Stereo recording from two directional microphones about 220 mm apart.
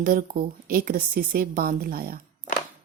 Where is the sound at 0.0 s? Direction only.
40° right (ahead or behind).